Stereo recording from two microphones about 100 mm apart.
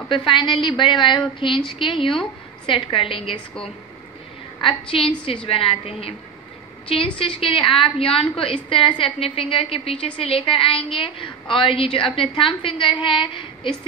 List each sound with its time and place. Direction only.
0.1 s a woman's voice: 55° left (ahead or behind)
4.6 s a woman's voice: 60° left (ahead or behind)
7.2 s a woman's voice: 65° left (ahead or behind)